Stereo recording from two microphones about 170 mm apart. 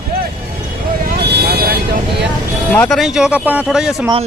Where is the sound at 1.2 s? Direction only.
70° right (ahead or behind).